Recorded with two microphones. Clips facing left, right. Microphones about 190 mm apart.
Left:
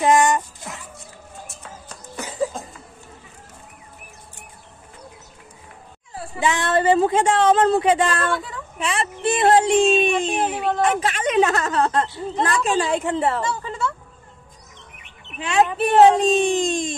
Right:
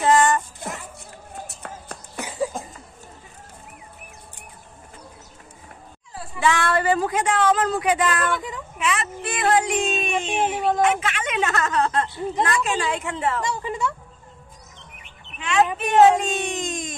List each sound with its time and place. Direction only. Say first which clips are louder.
0.0 s speech: left 1 dB; 15° left (ahead or behind)
0.6 s a sound: right 4 dB; 55° right (ahead or behind)
1.5 s music: right 3 dB; 60° right (ahead or behind)
2.1 s cough: left 1 dB; 15° right (ahead or behind)
6.4 s a woman's voice: left 2 dB; 20° left (ahead or behind)
13.4 s speech: even; 15° right (ahead or behind)
15.3 s speech: left 2 dB; 35° left (ahead or behind)